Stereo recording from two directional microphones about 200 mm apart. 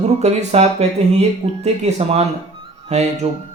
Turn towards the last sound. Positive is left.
turn(degrees=-35)  # may be behind; listen again after turning